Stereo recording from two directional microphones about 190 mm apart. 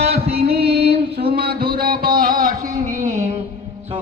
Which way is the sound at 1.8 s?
50° right (ahead or behind).